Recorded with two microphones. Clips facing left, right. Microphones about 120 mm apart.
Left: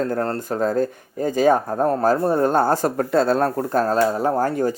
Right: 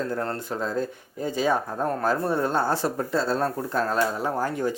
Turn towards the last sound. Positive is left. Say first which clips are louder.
# left 6 dB
turn(degrees=45)  # may be behind; listen again after turning